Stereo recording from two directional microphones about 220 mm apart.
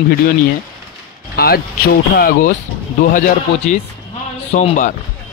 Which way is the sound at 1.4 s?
45° left (ahead or behind).